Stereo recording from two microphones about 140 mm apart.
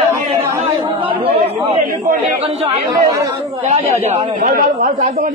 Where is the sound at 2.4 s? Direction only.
45° right (ahead or behind).